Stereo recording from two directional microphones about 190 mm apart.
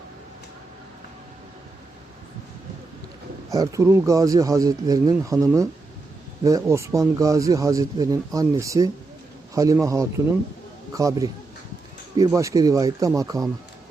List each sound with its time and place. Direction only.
3.5 s speech: 15° right (ahead or behind)